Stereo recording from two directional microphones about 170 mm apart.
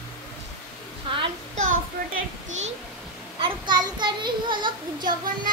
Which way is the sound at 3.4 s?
25° right (ahead or behind).